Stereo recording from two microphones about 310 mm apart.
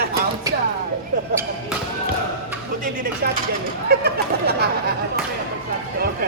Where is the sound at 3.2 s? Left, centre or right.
Right.